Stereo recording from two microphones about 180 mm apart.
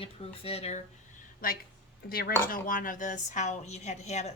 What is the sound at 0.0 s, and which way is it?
Speech, 35° left (ahead or behind).